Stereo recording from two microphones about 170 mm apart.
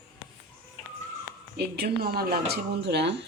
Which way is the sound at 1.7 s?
65° right (ahead or behind).